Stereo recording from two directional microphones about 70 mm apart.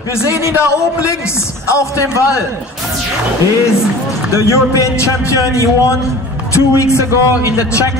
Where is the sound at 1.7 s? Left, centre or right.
Left.